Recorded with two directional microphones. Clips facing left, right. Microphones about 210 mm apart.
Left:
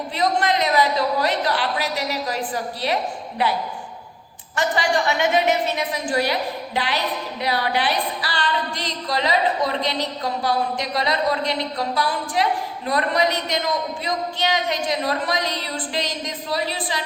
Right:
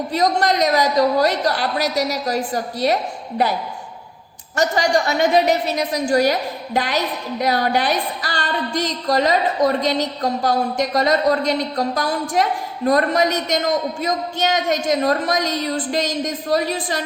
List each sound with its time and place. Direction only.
0.1 s a woman's voice: 40° right (ahead or behind)
4.5 s a woman's voice: 40° right (ahead or behind)